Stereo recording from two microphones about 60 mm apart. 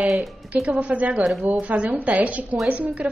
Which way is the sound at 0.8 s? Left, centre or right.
Right.